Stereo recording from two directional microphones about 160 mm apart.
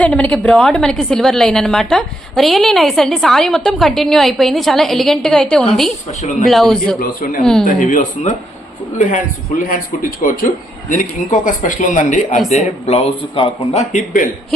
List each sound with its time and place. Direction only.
0.0 s a woman's voice: 10° left (ahead or behind)
7.0 s speech: 60° left (ahead or behind)
9.6 s a woman's voice: 60° left (ahead or behind); by 13.8 s 35° left (ahead or behind)
13.9 s a woman's voice: 50° left (ahead or behind)